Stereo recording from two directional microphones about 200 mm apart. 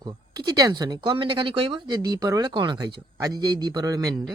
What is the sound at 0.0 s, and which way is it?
Speech, 20° right (ahead or behind).